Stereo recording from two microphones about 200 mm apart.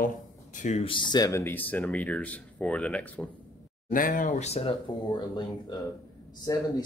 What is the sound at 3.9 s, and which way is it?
Speech, 40° left (ahead or behind).